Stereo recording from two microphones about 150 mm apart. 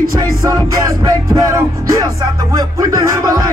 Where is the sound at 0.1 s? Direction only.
20° right (ahead or behind).